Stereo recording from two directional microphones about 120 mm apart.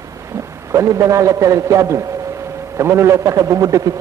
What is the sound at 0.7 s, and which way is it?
A man's voice, 25° right (ahead or behind).